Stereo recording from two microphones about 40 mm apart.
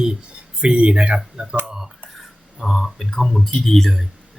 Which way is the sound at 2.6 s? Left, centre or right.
Centre.